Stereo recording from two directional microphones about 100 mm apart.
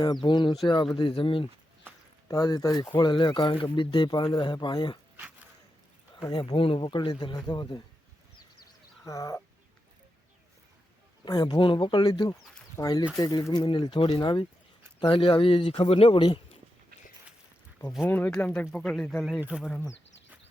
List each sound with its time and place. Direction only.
0.0 s speech: 50° left (ahead or behind)
2.2 s speech: 40° left (ahead or behind)
3.0 s speech: 50° left (ahead or behind)
5.1 s a sound: 15° right (ahead or behind)
6.3 s speech: 55° left (ahead or behind)
9.0 s speech: 35° left (ahead or behind)
11.3 s speech: 45° left (ahead or behind)
13.7 s speech: 50° left (ahead or behind)
14.0 s speech: 65° left (ahead or behind)
18.0 s speech: 20° left (ahead or behind)
19.4 s speech: 15° right (ahead or behind)